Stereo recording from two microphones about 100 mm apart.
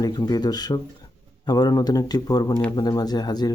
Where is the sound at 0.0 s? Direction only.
40° left (ahead or behind).